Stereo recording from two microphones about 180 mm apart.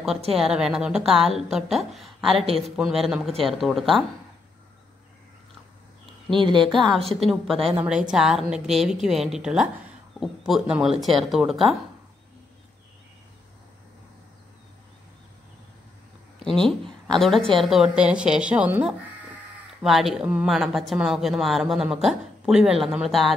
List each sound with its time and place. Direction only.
0.4 s speech: 5° right (ahead or behind)
6.3 s a woman's voice: 25° right (ahead or behind)
6.7 s speech: centre (ahead or behind)
7.0 s a woman's voice: 35° right (ahead or behind)
8.1 s speech: 5° right (ahead or behind)
16.4 s speech: 5° left (ahead or behind)